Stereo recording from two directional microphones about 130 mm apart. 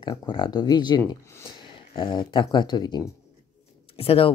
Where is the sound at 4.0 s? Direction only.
45° left (ahead or behind).